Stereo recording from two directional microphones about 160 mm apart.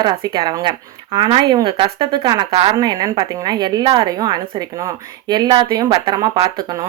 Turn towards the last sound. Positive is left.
turn(degrees=-40)  # may be behind; listen again after turning